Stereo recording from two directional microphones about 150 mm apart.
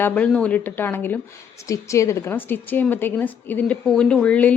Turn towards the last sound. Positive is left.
turn(degrees=10)  # may be behind; listen again after turning